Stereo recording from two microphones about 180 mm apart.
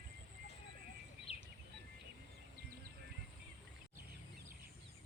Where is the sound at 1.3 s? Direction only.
35° left (ahead or behind).